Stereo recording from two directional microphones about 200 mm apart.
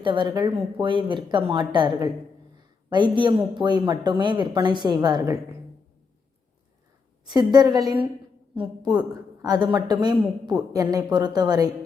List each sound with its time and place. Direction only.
0.0 s speech: 25° right (ahead or behind)
7.3 s speech: 20° right (ahead or behind)
9.4 s speech: 20° right (ahead or behind)